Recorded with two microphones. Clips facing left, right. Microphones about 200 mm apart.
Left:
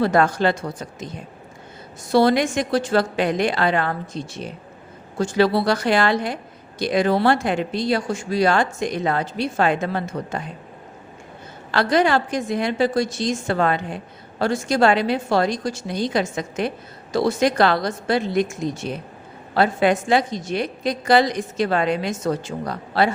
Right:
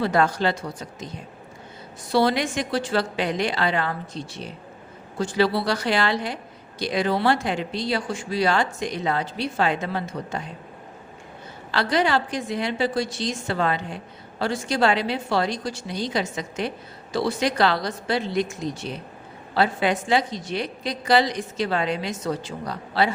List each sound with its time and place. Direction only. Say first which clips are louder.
0.0 s a woman's voice: left 3 dB; 50° left (ahead or behind)
2.1 s a woman's voice: left 4 dB; 45° left (ahead or behind)
11.7 s a woman's voice: left 4 dB; 50° left (ahead or behind)